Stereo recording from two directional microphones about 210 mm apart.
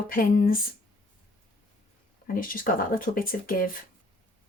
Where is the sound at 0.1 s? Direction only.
45° left (ahead or behind).